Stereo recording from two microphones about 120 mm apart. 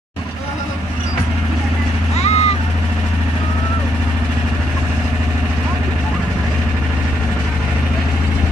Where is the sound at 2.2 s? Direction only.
65° left (ahead or behind).